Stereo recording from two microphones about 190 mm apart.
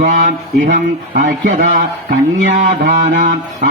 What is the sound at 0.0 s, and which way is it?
Speech, 40° right (ahead or behind).